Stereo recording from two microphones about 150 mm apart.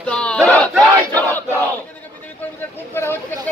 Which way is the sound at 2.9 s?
15° left (ahead or behind).